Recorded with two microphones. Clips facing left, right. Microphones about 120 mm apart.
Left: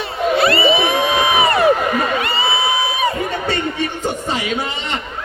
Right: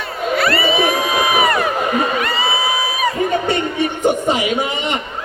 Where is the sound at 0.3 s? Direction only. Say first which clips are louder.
Left 1 dB; 25° left (ahead or behind).